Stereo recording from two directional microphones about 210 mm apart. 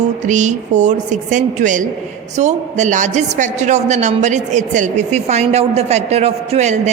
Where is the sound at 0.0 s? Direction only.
35° right (ahead or behind).